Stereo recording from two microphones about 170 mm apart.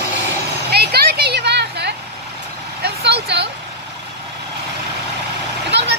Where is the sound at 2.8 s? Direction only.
75° right (ahead or behind).